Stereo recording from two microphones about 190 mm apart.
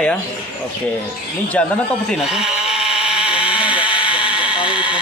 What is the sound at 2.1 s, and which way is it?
Sheep, centre (ahead or behind).